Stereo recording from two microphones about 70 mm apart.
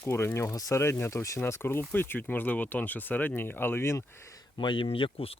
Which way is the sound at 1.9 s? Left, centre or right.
Left.